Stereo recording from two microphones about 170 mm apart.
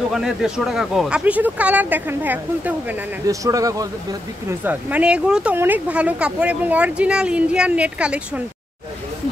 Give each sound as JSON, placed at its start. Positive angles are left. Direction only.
{"t": 0.1, "sound": "speech", "side_deg": 0}